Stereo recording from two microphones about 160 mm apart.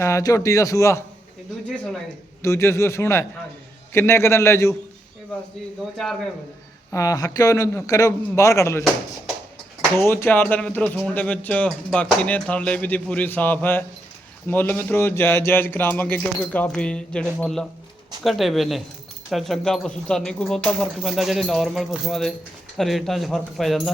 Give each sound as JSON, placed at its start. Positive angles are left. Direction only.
{"t": 0.0, "sound": "speech", "side_deg": 20}
{"t": 2.4, "sound": "speech", "side_deg": 15}
{"t": 6.9, "sound": "speech", "side_deg": 20}
{"t": 10.0, "sound": "speech", "side_deg": 15}